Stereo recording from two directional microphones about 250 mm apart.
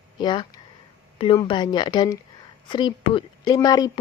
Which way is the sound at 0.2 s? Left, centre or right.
Centre.